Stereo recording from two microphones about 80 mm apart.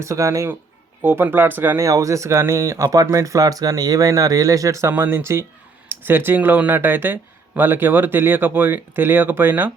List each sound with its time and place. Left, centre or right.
0.0 s speech: right
1.0 s speech: right
1.8 s speech: right